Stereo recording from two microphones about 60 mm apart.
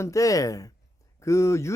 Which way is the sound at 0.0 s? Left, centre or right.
Left.